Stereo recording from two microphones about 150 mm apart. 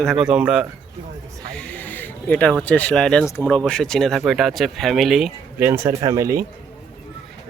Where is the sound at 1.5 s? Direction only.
10° left (ahead or behind).